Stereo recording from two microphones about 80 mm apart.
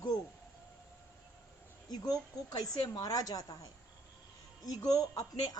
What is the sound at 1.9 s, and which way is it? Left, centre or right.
A woman's voice, left.